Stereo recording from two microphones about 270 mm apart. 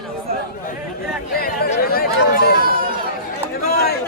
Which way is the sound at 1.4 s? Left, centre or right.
Left.